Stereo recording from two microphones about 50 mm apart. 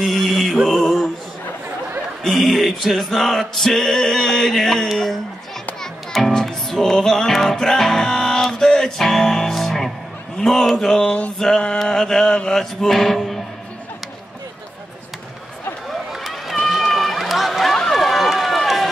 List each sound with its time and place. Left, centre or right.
0.0 s mantra: centre
2.2 s music: centre
6.1 s music: centre
11.1 s mantra: left
11.3 s a sound: centre
12.5 s music: centre
15.9 s run: centre